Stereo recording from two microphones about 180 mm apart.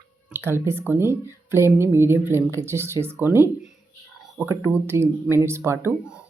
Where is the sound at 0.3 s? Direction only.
10° right (ahead or behind).